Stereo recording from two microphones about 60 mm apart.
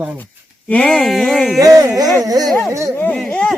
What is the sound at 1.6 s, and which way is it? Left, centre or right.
Speech, right.